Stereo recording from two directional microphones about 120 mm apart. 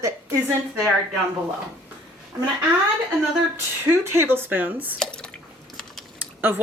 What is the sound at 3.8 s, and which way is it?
Speech, 20° right (ahead or behind).